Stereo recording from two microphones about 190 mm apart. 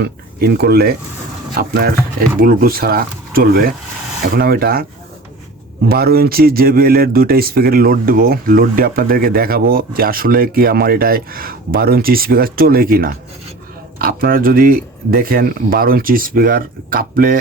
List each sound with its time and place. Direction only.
0.0 s speech: 60° right (ahead or behind)
2.4 s speech: 50° right (ahead or behind)
5.9 s speech: 55° right (ahead or behind)